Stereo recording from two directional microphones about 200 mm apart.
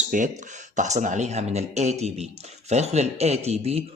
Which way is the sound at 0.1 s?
40° right (ahead or behind).